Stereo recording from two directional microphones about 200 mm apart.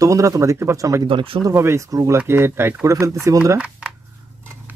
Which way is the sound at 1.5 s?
15° right (ahead or behind).